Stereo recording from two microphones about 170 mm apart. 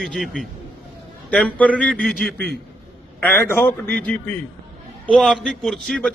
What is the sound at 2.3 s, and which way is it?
Speech, 65° left (ahead or behind).